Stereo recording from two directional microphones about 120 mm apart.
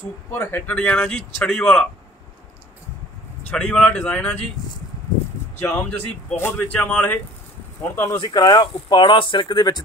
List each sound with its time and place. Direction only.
0.3 s speech: 20° left (ahead or behind)
3.4 s speech: 10° left (ahead or behind)
5.7 s speech: 5° left (ahead or behind)
6.3 s speech: 20° left (ahead or behind); by 9.8 s 35° left (ahead or behind)